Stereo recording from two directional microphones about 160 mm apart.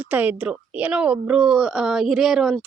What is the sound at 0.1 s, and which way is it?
A woman's voice, 10° right (ahead or behind).